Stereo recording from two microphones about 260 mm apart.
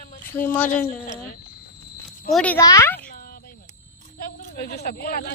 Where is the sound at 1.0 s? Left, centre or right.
Left.